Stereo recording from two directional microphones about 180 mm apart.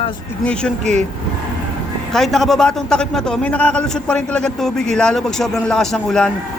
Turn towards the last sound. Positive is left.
turn(degrees=5)  # may be behind; listen again after turning